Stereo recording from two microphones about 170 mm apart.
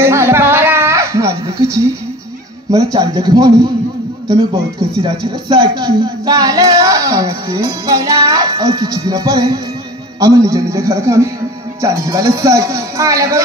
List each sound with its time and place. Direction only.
0.0 s music: 15° right (ahead or behind)
2.7 s speech: 20° right (ahead or behind)
5.0 s speech: 30° right (ahead or behind)